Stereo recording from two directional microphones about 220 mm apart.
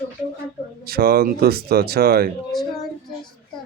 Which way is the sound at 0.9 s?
45° right (ahead or behind).